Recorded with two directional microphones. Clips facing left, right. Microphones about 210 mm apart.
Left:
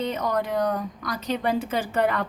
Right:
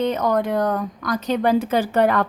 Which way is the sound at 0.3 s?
50° right (ahead or behind).